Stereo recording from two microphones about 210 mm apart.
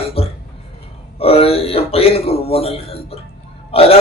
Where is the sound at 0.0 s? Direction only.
25° left (ahead or behind).